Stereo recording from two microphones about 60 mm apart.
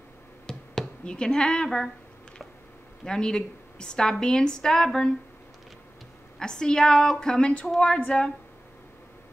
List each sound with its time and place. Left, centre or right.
0.5 s a sound: centre
3.1 s a woman's voice: centre
6.4 s a woman's voice: centre